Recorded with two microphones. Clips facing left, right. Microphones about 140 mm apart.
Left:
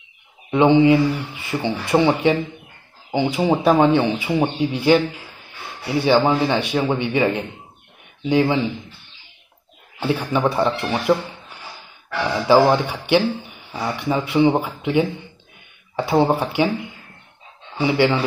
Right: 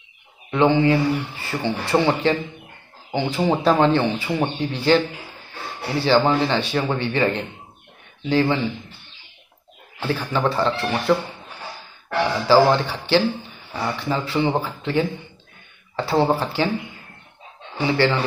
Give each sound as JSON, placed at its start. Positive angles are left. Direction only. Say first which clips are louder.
{"t": 0.5, "sound": "speech", "louder": "left 4 dB", "side_deg": 15}
{"t": 10.0, "sound": "speech", "louder": "left 2 dB", "side_deg": 10}
{"t": 12.4, "sound": "speech", "louder": "left 1 dB", "side_deg": 15}
{"t": 17.7, "sound": "speech", "louder": "left 2 dB", "side_deg": 15}